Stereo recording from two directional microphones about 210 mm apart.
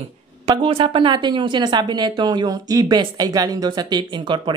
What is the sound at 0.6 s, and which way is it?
Speech, 25° right (ahead or behind).